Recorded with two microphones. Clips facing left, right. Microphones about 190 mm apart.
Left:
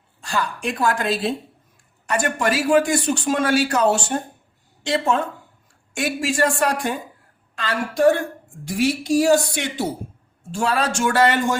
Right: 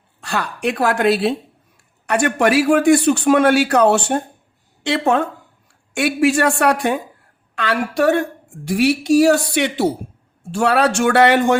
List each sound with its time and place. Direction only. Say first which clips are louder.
0.2 s a woman's voice: right 2 dB; 65° right (ahead or behind)